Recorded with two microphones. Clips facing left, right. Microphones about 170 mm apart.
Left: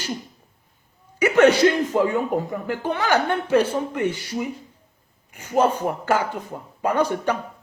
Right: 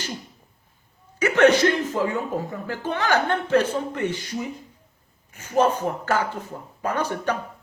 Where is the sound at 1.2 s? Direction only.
10° left (ahead or behind).